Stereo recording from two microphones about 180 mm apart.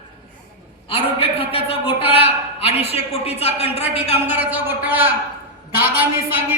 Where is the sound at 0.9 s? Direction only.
30° left (ahead or behind).